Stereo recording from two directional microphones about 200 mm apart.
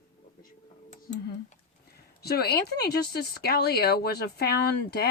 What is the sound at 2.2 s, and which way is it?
Speech, 50° left (ahead or behind).